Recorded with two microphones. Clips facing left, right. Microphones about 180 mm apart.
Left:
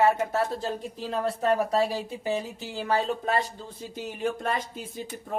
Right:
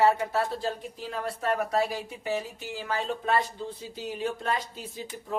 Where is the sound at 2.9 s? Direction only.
40° left (ahead or behind).